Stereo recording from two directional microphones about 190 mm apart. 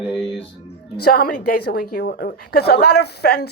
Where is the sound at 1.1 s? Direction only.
55° left (ahead or behind).